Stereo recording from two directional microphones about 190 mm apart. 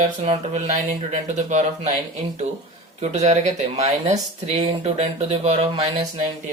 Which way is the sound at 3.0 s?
35° right (ahead or behind).